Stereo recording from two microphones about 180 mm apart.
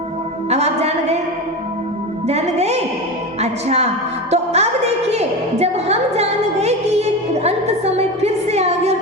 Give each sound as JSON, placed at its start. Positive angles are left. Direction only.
{"t": 0.5, "sound": "a woman's voice", "side_deg": -35}
{"t": 2.2, "sound": "a woman's voice", "side_deg": -35}